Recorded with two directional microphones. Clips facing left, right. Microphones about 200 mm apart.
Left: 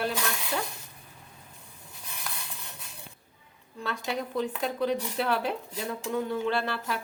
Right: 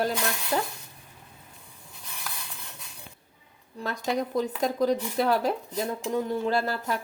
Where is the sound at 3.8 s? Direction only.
40° right (ahead or behind).